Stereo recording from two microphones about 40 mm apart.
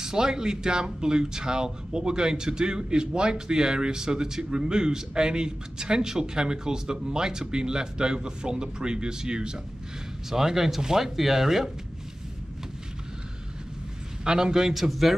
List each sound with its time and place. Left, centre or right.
0.0 s a man's voice: centre
14.2 s a man's voice: centre